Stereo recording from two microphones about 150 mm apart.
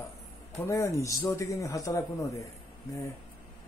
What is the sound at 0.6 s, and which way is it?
Speech, 20° left (ahead or behind).